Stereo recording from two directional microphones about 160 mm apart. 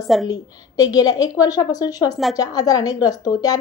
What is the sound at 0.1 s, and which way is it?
Speech, centre (ahead or behind).